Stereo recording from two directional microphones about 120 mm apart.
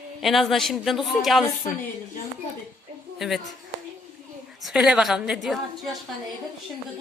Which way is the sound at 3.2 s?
Centre (ahead or behind).